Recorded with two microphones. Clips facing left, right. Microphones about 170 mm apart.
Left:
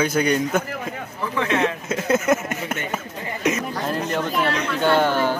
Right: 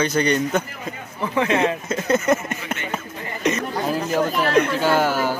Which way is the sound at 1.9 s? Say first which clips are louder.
Left 1 dB; 5° left (ahead or behind).